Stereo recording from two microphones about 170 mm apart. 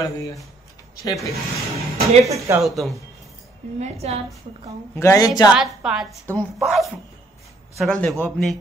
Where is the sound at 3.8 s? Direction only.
40° right (ahead or behind).